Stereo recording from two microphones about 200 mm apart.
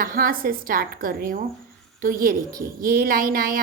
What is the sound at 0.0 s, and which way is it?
A woman's voice, 45° right (ahead or behind).